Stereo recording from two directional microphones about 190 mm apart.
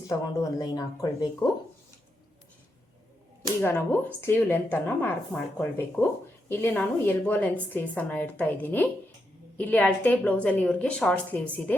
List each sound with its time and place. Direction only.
0.1 s speech: 15° left (ahead or behind)
3.6 s speech: 10° left (ahead or behind)